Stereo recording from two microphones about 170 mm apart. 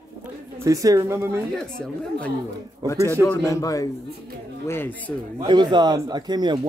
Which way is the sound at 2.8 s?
20° right (ahead or behind).